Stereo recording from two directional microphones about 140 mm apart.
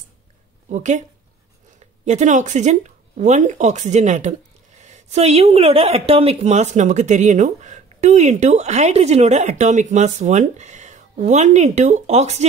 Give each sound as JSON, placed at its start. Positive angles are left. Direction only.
{"t": 0.7, "sound": "speech", "side_deg": -60}